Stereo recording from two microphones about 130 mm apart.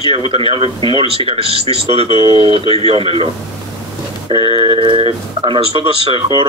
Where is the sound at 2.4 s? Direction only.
40° right (ahead or behind).